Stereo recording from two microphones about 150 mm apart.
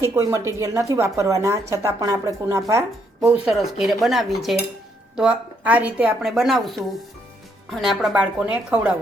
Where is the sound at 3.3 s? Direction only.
5° right (ahead or behind).